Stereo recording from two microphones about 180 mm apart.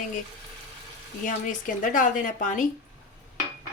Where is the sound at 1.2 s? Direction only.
45° left (ahead or behind).